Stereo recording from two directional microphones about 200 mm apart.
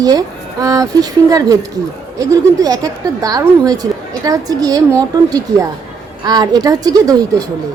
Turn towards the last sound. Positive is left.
turn(degrees=-20)  # may be behind; listen again after turning